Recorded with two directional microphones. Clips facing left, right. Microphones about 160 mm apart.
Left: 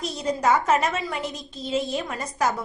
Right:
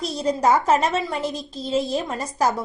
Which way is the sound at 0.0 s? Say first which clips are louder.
Right 3 dB; 35° right (ahead or behind).